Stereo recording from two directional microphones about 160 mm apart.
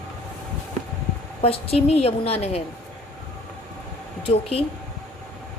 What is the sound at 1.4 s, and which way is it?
A woman's voice, 40° left (ahead or behind).